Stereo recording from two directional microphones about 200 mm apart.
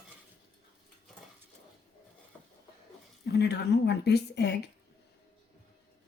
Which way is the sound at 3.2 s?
55° left (ahead or behind).